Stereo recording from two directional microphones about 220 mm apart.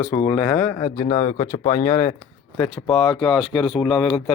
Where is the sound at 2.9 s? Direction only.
20° left (ahead or behind).